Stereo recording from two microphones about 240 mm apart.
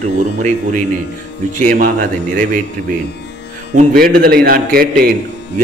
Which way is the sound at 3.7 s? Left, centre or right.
Right.